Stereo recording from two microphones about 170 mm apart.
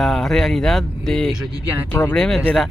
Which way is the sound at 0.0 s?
Centre (ahead or behind).